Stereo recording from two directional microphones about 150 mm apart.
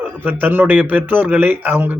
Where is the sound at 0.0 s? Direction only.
10° right (ahead or behind).